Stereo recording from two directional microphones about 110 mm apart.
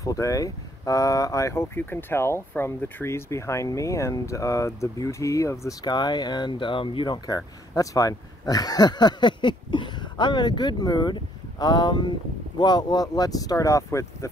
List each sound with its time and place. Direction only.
0.0 s speech: 30° left (ahead or behind)
5.9 s speech: 40° left (ahead or behind)
7.2 s speech: 30° left (ahead or behind)